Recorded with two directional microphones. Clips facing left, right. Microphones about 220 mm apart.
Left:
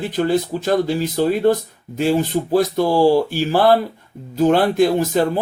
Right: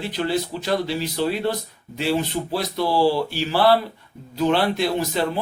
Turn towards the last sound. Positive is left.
turn(degrees=45)  # may be behind; listen again after turning